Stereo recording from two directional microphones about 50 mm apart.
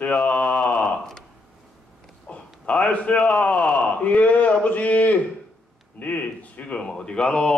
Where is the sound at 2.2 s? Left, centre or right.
Left.